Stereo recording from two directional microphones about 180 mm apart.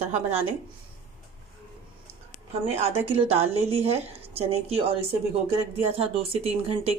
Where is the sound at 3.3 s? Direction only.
35° right (ahead or behind).